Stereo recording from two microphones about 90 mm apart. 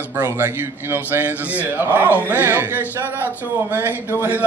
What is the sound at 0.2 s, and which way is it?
A man's voice, 25° right (ahead or behind).